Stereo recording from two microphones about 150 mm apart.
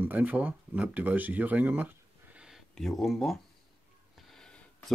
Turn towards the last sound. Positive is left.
turn(degrees=5)  # may be behind; listen again after turning